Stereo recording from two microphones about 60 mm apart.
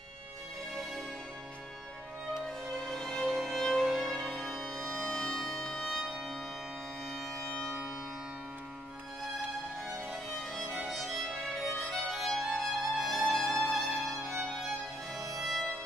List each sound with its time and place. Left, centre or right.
2.8 s music: centre
7.3 s music: centre
10.5 s music: centre
13.3 s music: centre
13.7 s music: centre
15.3 s music: centre